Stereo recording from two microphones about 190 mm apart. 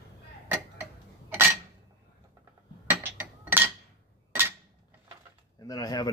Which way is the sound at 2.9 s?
10° right (ahead or behind).